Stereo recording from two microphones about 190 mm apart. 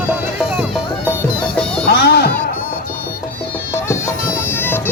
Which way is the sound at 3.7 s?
15° left (ahead or behind).